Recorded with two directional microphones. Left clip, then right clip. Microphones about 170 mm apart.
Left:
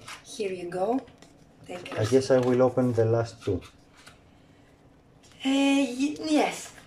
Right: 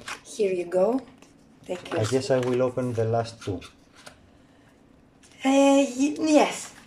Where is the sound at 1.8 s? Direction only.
Centre (ahead or behind).